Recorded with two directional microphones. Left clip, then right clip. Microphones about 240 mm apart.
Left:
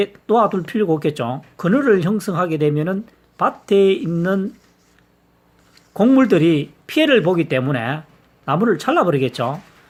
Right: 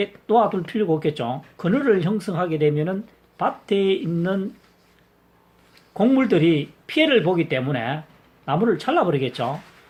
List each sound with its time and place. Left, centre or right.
0.0 s speech: left
5.9 s speech: left